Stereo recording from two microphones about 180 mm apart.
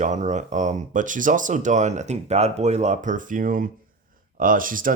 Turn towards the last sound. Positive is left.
turn(degrees=-50)  # may be behind; listen again after turning